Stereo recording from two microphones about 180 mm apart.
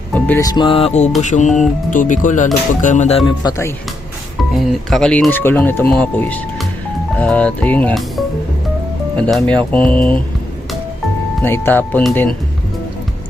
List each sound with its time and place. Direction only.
0.1 s speech: 10° left (ahead or behind)
0.4 s music: 25° left (ahead or behind)
1.2 s speech: 40° left (ahead or behind)
2.8 s music: 40° left (ahead or behind)
3.4 s speech: 20° left (ahead or behind)
4.5 s speech: centre (ahead or behind)
11.4 s speech: 10° left (ahead or behind)